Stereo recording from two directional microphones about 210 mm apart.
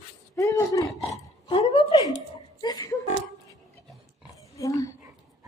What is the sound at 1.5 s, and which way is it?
Speech, 25° left (ahead or behind).